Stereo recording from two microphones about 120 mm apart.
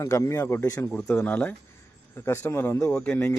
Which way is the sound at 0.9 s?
10° left (ahead or behind).